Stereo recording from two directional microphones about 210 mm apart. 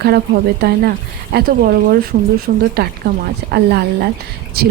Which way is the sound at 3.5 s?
50° right (ahead or behind).